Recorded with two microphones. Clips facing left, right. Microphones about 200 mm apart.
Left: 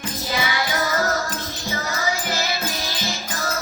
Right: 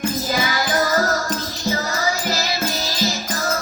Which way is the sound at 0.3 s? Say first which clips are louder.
Even; 45° right (ahead or behind).